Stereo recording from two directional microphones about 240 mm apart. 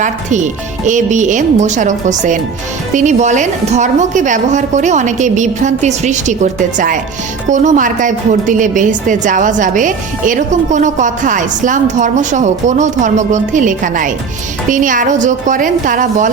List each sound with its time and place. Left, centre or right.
0.0 s a woman's voice: right